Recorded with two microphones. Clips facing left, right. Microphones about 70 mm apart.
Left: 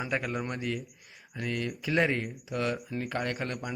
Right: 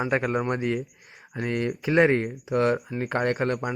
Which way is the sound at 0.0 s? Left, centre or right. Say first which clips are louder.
Right 7 dB; right.